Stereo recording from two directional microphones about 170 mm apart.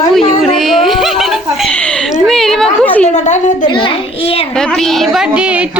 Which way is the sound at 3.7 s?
30° left (ahead or behind).